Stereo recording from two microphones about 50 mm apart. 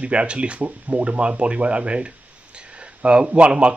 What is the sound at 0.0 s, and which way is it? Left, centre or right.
Speech, right.